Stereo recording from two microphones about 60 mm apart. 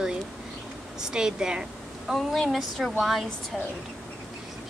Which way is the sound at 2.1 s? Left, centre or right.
Centre.